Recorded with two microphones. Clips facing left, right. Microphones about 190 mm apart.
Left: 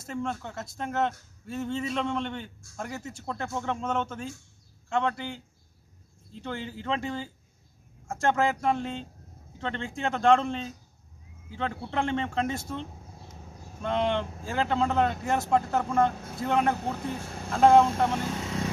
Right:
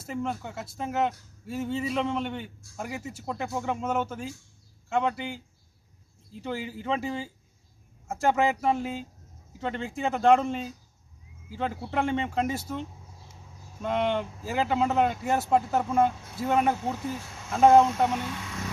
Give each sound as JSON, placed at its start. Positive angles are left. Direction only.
{"t": 0.0, "sound": "a man's voice", "side_deg": -5}
{"t": 13.8, "sound": "speech", "side_deg": -5}
{"t": 17.0, "sound": "speech", "side_deg": 55}
{"t": 17.5, "sound": "speech", "side_deg": -5}
{"t": 18.3, "sound": "a sound", "side_deg": 35}